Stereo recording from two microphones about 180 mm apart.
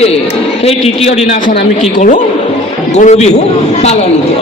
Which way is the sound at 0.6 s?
35° left (ahead or behind).